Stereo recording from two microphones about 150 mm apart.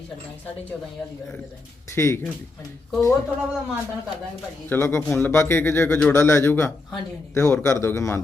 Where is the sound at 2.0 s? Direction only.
15° left (ahead or behind).